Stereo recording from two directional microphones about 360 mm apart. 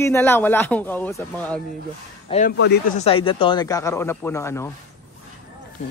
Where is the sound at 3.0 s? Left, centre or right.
Centre.